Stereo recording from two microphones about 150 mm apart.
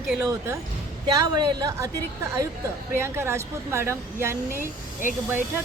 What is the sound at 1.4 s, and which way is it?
A woman's voice, 25° right (ahead or behind).